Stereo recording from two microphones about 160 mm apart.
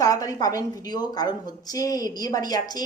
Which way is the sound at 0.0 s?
25° left (ahead or behind).